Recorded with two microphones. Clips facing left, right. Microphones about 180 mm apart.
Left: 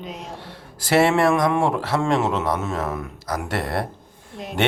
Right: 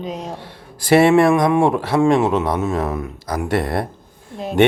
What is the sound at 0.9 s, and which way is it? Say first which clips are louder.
Speech: right 5 dB; 15° right (ahead or behind).